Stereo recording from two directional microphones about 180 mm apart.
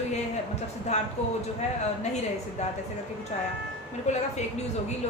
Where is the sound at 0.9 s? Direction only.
40° left (ahead or behind).